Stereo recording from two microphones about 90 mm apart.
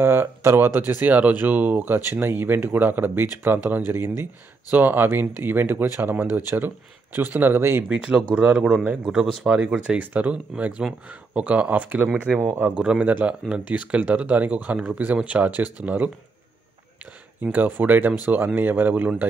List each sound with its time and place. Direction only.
0.0 s speech: 25° right (ahead or behind)
7.9 s speech: 10° right (ahead or behind)
17.4 s speech: 20° right (ahead or behind)